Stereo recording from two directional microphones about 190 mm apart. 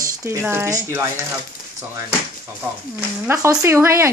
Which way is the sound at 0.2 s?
15° right (ahead or behind).